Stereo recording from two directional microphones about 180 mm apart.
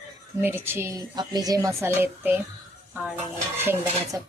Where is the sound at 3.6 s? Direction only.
20° right (ahead or behind).